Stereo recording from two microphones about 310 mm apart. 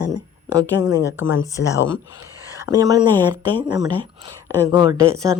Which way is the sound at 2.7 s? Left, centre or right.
Centre.